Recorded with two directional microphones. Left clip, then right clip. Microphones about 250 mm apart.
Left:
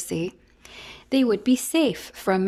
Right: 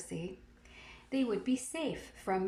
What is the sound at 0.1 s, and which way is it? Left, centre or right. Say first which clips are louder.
Speech: left 15 dB; left.